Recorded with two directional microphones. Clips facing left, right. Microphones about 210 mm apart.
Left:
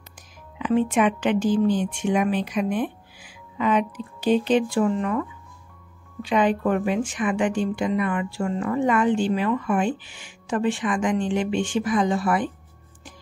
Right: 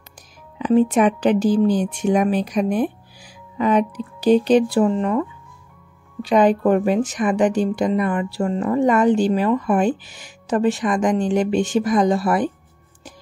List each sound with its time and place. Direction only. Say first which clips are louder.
0.6 s a woman's voice: right 5 dB; 40° right (ahead or behind)
6.2 s a woman's voice: right 5 dB; 40° right (ahead or behind)